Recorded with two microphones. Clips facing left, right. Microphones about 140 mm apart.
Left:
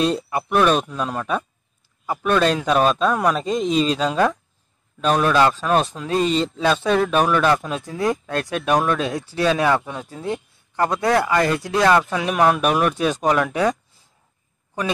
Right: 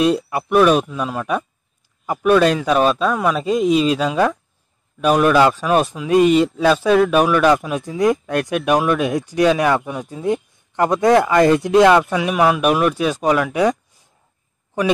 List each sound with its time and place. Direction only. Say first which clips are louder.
0.0 s speech: right 4 dB; 10° right (ahead or behind)
11.9 s speech: right 3 dB; 10° right (ahead or behind)